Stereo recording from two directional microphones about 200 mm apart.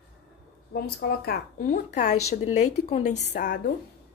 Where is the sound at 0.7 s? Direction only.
50° left (ahead or behind).